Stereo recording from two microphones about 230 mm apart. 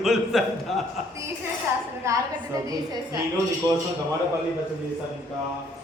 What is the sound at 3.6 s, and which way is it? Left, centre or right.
Speech, centre.